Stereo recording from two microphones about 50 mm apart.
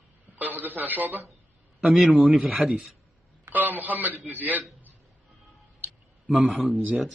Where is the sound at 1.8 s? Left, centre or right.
Centre.